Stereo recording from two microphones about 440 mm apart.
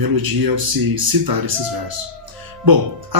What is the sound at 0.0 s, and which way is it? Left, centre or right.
Speech, right.